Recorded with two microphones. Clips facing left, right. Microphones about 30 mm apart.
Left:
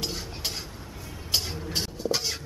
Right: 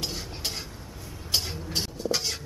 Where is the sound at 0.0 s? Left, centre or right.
Centre.